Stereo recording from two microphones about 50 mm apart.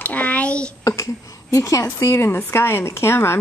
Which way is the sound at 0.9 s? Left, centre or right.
Left.